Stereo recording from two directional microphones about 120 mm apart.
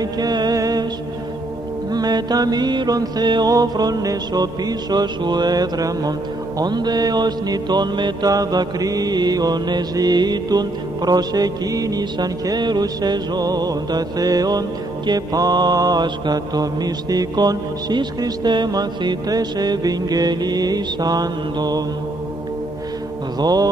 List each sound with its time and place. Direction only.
0.0 s music: 35° right (ahead or behind)
1.9 s music: 35° right (ahead or behind)
23.4 s music: 35° right (ahead or behind)